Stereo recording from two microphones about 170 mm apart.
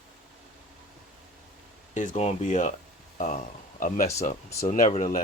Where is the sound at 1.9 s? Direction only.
50° left (ahead or behind).